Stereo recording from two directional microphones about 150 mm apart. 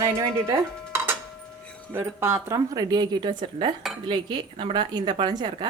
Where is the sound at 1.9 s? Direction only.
15° right (ahead or behind).